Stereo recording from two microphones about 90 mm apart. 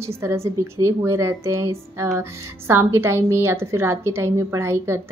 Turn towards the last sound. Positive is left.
turn(degrees=-30)  # may be behind; listen again after turning